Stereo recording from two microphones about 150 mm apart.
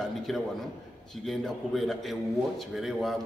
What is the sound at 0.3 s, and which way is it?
A man's voice, centre (ahead or behind).